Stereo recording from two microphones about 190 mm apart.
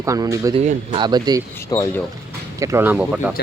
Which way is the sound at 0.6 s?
30° right (ahead or behind).